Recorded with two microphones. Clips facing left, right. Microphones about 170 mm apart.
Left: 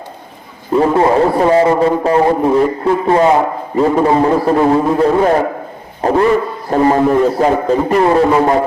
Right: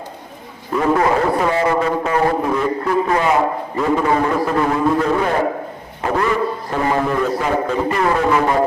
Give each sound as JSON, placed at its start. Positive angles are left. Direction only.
{"t": 0.7, "sound": "a man's voice", "side_deg": 30}